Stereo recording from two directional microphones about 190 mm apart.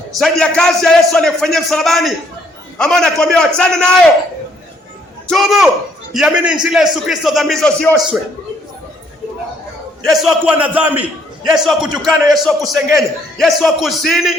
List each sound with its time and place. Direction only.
0.2 s a man's voice: 5° left (ahead or behind)
5.3 s a man's voice: centre (ahead or behind)
10.0 s a man's voice: centre (ahead or behind)